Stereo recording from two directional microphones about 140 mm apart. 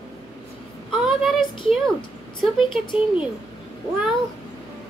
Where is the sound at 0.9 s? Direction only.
Centre (ahead or behind).